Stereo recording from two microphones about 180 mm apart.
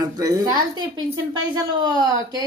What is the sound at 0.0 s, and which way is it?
A woman's voice, 20° right (ahead or behind).